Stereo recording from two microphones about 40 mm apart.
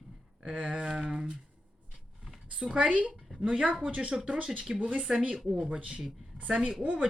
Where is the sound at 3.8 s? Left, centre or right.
Right.